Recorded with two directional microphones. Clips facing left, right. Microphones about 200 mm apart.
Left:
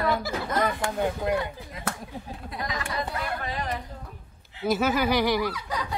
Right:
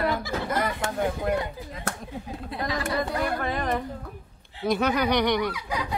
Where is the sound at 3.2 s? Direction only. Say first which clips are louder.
Right 5 dB; 50° right (ahead or behind).